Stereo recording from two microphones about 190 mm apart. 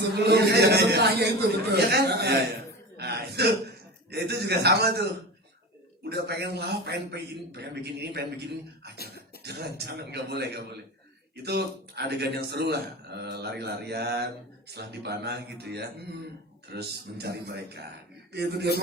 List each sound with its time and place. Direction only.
0.1 s a man's voice: 60° right (ahead or behind)
3.0 s throat clearing: 60° right (ahead or behind)
6.0 s speech: 60° right (ahead or behind)